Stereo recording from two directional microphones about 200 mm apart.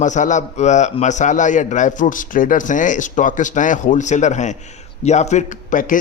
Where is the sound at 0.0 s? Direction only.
40° left (ahead or behind).